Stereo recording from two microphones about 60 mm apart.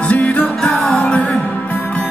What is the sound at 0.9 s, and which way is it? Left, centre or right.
Music, left.